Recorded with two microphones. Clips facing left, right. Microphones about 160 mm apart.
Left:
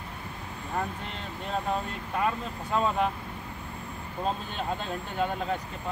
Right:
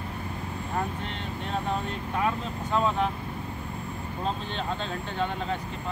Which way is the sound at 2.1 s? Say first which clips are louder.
Even; centre (ahead or behind).